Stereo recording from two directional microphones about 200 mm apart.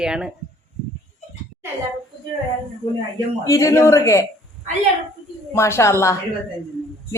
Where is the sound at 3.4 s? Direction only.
15° left (ahead or behind).